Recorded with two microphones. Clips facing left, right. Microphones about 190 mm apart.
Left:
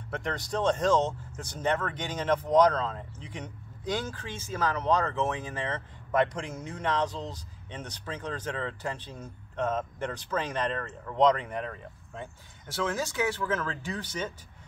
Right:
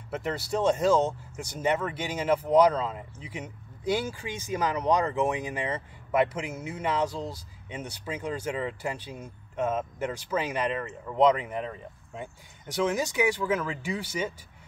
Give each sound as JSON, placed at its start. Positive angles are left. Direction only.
{"t": 0.1, "sound": "speech", "side_deg": -5}